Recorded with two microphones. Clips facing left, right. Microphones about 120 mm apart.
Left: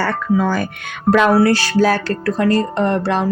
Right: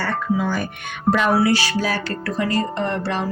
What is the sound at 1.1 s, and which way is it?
Speech, 90° left.